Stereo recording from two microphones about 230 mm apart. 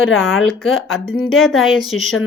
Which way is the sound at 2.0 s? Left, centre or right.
Left.